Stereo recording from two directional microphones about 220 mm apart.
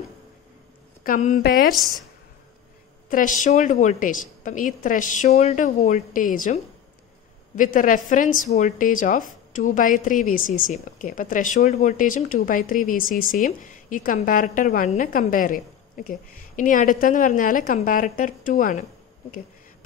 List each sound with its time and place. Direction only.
1.0 s speech: 35° left (ahead or behind)
3.1 s speech: 35° left (ahead or behind)